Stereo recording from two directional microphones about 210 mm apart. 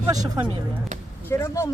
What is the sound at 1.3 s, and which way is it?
Speech, 15° left (ahead or behind).